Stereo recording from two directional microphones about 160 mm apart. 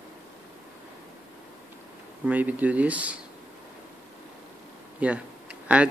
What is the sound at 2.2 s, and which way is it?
Speech, 10° right (ahead or behind).